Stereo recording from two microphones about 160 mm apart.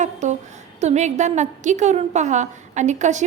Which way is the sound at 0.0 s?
50° right (ahead or behind).